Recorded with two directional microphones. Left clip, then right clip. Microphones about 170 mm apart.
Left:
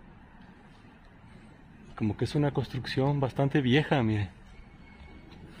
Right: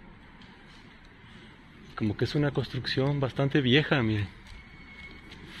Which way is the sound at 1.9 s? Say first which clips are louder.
Right 2 dB; 25° left (ahead or behind).